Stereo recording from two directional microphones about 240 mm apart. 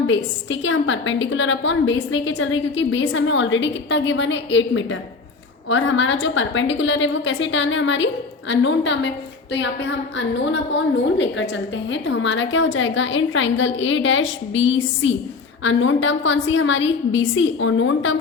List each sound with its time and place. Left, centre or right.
0.6 s a woman's voice: left